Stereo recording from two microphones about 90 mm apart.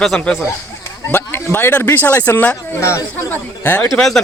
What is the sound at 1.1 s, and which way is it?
Speech, 25° left (ahead or behind).